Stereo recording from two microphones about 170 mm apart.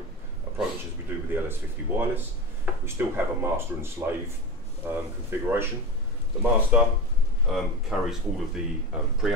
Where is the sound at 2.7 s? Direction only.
10° right (ahead or behind).